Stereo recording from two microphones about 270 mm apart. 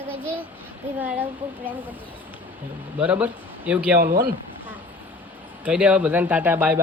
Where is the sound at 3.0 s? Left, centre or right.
Centre.